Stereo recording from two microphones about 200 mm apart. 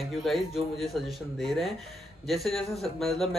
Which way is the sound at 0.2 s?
Centre (ahead or behind).